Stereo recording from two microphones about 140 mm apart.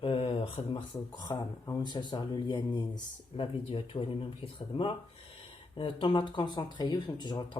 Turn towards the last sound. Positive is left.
turn(degrees=30)  # may be behind; listen again after turning